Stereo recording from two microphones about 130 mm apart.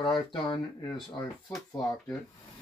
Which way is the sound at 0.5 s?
35° left (ahead or behind).